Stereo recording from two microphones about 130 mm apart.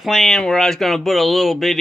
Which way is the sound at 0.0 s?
Centre (ahead or behind).